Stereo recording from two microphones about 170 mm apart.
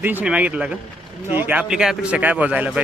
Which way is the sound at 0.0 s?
10° right (ahead or behind).